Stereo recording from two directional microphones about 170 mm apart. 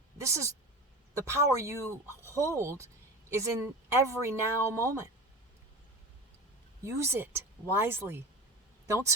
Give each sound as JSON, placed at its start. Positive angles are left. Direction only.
{"t": 0.2, "sound": "speech", "side_deg": -15}
{"t": 1.8, "sound": "speech", "side_deg": 15}
{"t": 2.3, "sound": "speech", "side_deg": -20}
{"t": 6.8, "sound": "speech", "side_deg": -15}